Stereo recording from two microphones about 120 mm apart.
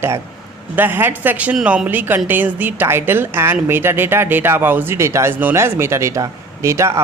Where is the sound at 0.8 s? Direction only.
15° right (ahead or behind).